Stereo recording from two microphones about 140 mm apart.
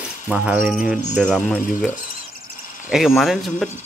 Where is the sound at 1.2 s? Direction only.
5° left (ahead or behind).